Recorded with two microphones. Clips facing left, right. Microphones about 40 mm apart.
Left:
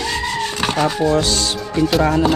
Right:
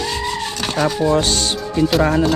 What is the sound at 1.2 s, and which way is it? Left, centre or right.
Speech, right.